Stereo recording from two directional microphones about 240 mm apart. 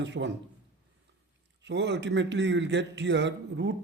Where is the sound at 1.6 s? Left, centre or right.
Right.